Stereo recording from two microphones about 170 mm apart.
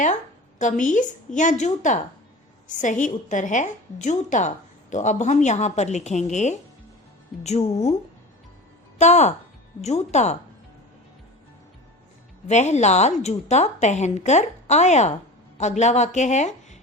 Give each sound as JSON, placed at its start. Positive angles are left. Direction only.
{"t": 0.6, "sound": "a woman's voice", "side_deg": 45}
{"t": 9.0, "sound": "a woman's voice", "side_deg": 40}
{"t": 12.5, "sound": "a woman's voice", "side_deg": 40}